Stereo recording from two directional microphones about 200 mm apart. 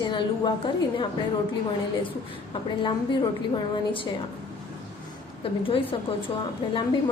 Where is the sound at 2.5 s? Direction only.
25° left (ahead or behind).